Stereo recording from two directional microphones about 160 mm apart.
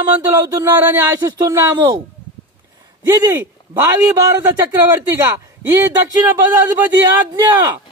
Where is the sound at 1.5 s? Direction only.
20° right (ahead or behind).